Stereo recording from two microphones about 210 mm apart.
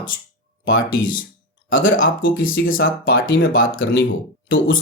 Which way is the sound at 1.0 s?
40° left (ahead or behind).